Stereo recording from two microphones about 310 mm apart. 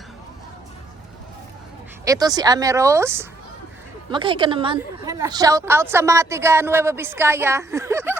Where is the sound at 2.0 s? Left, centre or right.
Centre.